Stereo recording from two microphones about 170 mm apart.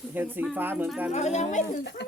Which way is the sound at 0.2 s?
10° right (ahead or behind).